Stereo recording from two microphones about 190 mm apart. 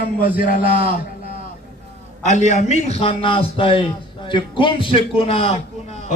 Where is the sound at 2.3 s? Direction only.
40° left (ahead or behind).